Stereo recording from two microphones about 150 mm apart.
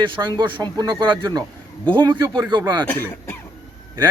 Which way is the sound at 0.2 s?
30° right (ahead or behind).